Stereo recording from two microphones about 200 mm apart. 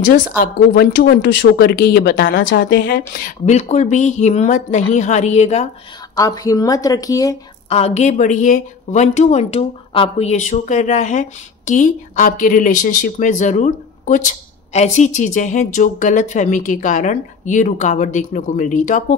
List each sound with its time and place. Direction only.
0.0 s speech: 55° left (ahead or behind)
3.3 s speech: 35° left (ahead or behind)
6.1 s speech: 15° left (ahead or behind)
7.7 s speech: 35° left (ahead or behind)